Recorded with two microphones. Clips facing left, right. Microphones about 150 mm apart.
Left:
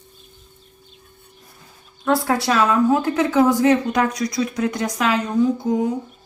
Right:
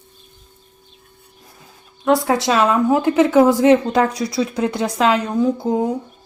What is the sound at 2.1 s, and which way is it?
A woman's voice, 20° right (ahead or behind).